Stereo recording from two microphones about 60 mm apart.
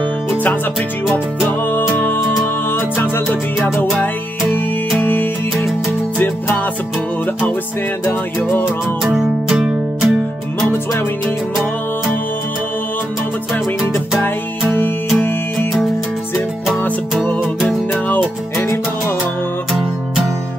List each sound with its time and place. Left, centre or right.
0.3 s music: left
1.7 s music: left
5.0 s music: left
8.1 s music: left
9.0 s music: centre
14.2 s music: left
18.0 s music: left